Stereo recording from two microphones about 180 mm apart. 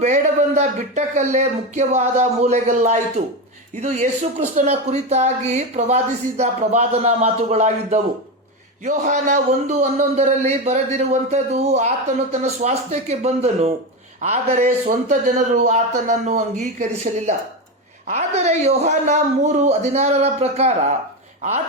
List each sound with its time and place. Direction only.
0.0 s a man's voice: 40° right (ahead or behind)